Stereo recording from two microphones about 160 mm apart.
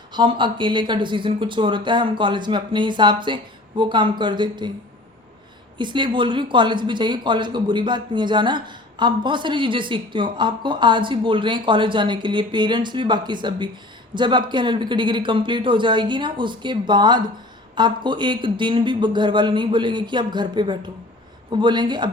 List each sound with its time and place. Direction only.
0.1 s speech: 30° right (ahead or behind)
5.7 s speech: 30° right (ahead or behind)